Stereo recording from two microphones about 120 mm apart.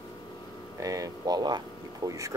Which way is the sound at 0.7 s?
30° right (ahead or behind).